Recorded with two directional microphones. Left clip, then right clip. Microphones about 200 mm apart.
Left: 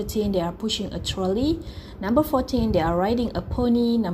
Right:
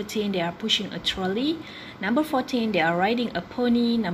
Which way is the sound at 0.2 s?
10° right (ahead or behind).